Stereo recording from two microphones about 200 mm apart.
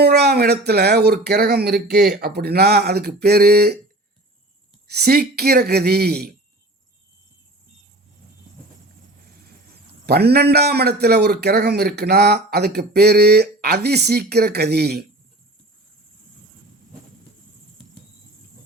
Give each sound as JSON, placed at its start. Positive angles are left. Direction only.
{"t": 0.0, "sound": "a man's voice", "side_deg": -55}
{"t": 4.9, "sound": "a man's voice", "side_deg": -50}
{"t": 10.1, "sound": "a man's voice", "side_deg": -55}